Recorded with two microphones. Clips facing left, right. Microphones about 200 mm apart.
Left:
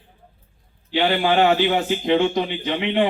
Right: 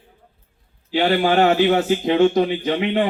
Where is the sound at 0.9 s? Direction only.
40° right (ahead or behind).